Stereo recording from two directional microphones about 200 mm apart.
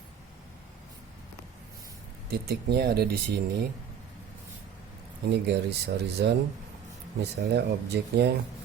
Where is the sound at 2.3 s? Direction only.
50° right (ahead or behind).